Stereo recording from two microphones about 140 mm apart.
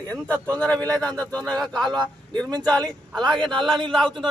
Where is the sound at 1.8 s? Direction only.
30° right (ahead or behind).